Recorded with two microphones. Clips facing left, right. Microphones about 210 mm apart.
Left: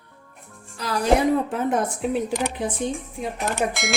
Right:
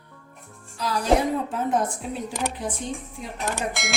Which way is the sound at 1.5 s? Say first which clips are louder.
Left 1 dB; 65° left (ahead or behind).